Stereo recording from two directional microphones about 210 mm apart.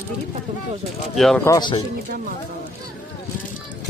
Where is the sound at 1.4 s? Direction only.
20° left (ahead or behind).